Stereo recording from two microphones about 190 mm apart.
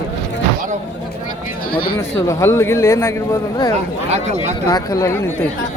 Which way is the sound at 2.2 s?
15° left (ahead or behind).